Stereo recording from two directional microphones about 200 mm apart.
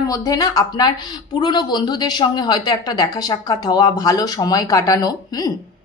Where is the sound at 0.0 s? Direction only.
15° left (ahead or behind).